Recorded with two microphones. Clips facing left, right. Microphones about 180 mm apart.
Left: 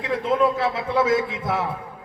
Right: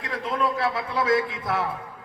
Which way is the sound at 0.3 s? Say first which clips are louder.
Left 4 dB; 25° left (ahead or behind).